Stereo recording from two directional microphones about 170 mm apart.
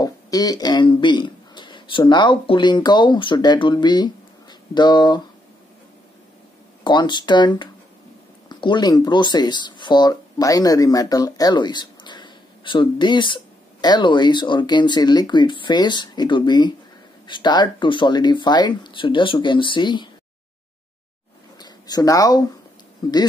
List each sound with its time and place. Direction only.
0.0 s speech: 20° left (ahead or behind)
6.8 s speech: 25° left (ahead or behind)
21.5 s speech: 25° left (ahead or behind)